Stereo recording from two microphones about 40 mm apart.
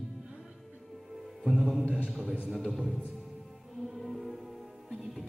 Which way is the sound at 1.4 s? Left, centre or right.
Centre.